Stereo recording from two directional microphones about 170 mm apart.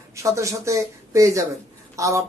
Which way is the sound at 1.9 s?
20° right (ahead or behind).